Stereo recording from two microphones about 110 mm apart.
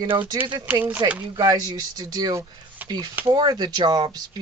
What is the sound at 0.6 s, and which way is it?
Speech, 15° right (ahead or behind).